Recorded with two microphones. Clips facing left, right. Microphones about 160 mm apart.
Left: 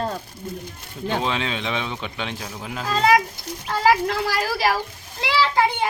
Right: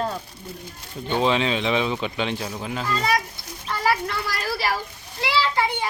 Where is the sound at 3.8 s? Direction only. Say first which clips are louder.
Left 5 dB; 90° left.